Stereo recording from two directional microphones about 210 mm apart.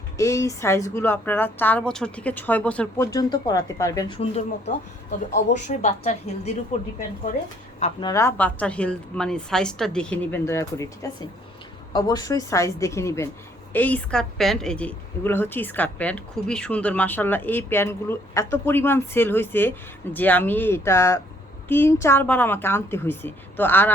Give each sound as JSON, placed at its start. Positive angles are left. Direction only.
{"t": 0.2, "sound": "a woman's voice", "side_deg": 15}
{"t": 3.1, "sound": "a woman's voice", "side_deg": 20}
{"t": 4.2, "sound": "a woman's voice", "side_deg": 30}
{"t": 8.0, "sound": "a woman's voice", "side_deg": 15}